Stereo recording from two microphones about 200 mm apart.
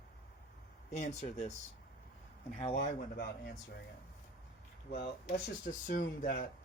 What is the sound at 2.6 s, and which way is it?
Speech, 30° left (ahead or behind).